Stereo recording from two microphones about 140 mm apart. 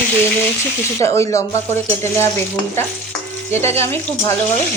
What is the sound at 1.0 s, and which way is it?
A woman's voice, 20° left (ahead or behind).